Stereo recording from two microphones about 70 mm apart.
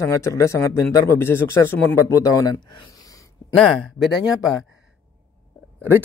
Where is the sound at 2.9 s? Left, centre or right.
Left.